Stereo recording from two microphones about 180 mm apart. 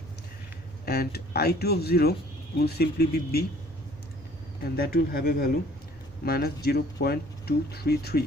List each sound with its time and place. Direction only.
0.8 s speech: 60° left (ahead or behind)
4.7 s speech: 60° left (ahead or behind)